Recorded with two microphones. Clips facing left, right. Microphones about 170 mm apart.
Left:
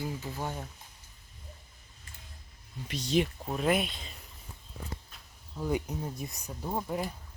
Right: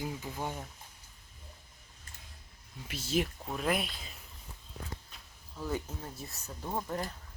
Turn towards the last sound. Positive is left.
turn(degrees=10)  # may be behind; listen again after turning